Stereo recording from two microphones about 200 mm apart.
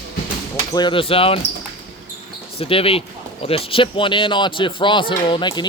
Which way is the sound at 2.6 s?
30° left (ahead or behind).